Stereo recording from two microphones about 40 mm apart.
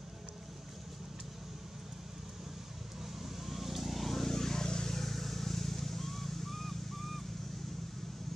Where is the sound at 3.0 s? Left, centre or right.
Centre.